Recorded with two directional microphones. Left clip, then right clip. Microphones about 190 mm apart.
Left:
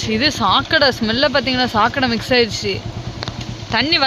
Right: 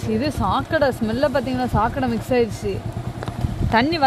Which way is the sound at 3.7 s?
20° right (ahead or behind).